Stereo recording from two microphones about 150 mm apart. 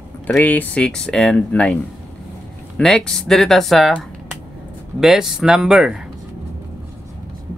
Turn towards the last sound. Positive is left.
turn(degrees=-5)  # may be behind; listen again after turning